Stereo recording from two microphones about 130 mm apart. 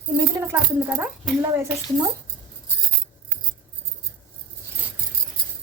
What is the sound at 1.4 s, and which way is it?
Speech, 20° right (ahead or behind).